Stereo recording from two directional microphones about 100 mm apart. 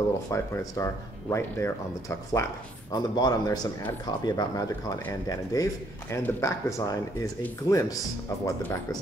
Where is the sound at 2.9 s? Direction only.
45° left (ahead or behind).